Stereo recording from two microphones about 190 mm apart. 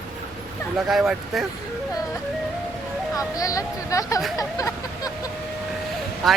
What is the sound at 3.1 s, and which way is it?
Speech, 20° left (ahead or behind).